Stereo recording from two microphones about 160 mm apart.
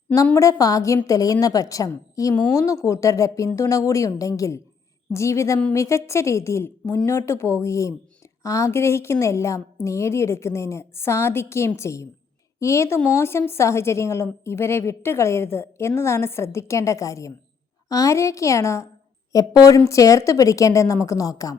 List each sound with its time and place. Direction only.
0.3 s a woman's voice: 20° left (ahead or behind)